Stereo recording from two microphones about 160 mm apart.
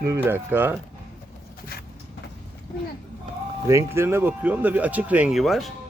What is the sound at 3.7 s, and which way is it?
Speech, 15° right (ahead or behind).